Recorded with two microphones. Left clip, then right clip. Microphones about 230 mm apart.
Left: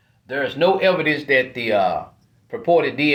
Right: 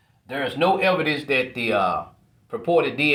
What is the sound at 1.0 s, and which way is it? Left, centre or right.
Speech, centre.